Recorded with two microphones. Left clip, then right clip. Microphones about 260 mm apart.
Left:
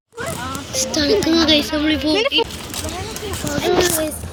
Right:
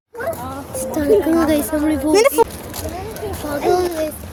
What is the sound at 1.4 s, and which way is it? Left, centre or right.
Speech, right.